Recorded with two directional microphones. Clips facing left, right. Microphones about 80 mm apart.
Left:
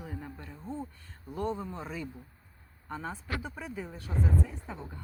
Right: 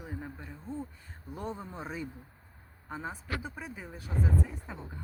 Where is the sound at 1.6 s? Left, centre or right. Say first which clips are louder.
Left 1 dB; centre.